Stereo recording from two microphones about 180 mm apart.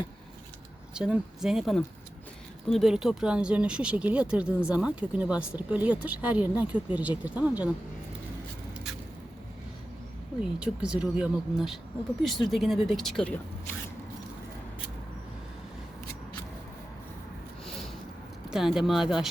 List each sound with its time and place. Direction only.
0.9 s speech: 5° right (ahead or behind)
10.4 s speech: 5° right (ahead or behind)
18.5 s speech: 5° right (ahead or behind)